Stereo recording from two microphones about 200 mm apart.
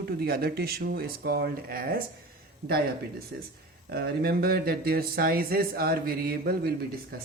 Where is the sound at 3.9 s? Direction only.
50° right (ahead or behind).